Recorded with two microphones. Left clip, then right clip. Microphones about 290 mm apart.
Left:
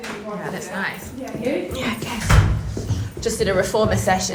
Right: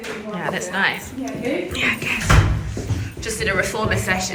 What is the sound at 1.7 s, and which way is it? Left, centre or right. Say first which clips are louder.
A woman's voice: right 5 dB; centre.